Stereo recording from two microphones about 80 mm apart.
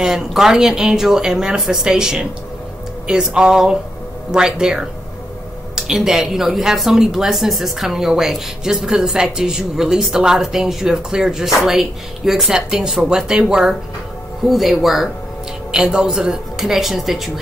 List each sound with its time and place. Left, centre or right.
0.0 s speech: centre